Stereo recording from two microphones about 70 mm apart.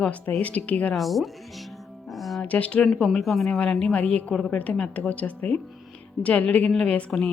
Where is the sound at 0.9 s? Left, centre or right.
Centre.